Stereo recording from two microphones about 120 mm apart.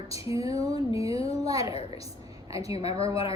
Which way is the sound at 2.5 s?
55° left (ahead or behind).